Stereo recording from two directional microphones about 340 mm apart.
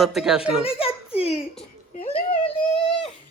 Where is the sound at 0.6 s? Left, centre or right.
Centre.